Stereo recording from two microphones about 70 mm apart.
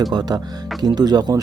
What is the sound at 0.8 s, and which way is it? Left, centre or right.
Speech, right.